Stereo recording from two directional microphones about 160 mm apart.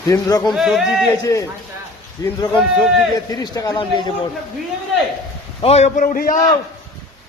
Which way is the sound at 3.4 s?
25° left (ahead or behind).